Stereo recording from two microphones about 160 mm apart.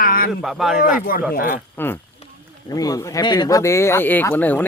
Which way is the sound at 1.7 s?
15° left (ahead or behind).